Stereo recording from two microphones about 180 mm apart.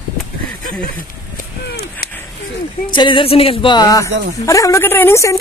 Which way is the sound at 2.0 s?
60° left (ahead or behind).